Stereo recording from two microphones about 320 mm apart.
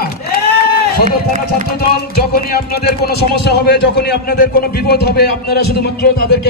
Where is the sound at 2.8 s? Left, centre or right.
Left.